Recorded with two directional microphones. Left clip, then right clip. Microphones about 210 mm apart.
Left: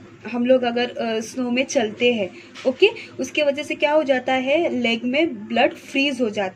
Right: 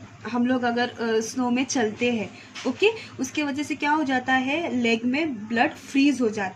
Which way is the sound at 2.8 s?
15° left (ahead or behind).